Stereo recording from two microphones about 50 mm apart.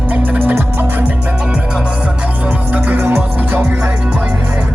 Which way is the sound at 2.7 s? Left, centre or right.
Right.